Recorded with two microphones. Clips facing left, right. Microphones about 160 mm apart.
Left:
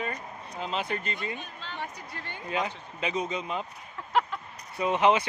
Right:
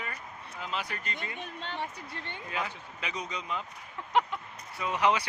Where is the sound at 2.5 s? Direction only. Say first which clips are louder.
Left 6 dB; 20° left (ahead or behind).